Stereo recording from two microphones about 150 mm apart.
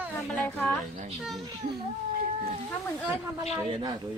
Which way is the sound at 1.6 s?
65° right (ahead or behind).